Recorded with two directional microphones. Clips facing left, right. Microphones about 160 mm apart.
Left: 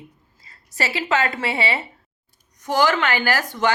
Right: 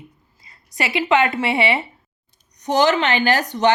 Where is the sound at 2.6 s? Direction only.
20° right (ahead or behind).